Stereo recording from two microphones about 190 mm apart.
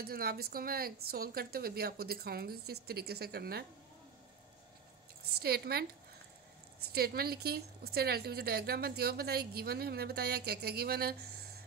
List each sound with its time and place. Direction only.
0.0 s speech: 55° right (ahead or behind)
5.3 s a woman's voice: 55° right (ahead or behind)